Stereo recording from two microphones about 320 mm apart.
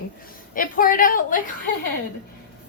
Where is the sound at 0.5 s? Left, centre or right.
Left.